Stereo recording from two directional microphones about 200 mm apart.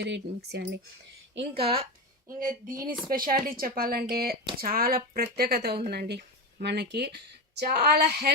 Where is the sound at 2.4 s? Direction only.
45° right (ahead or behind).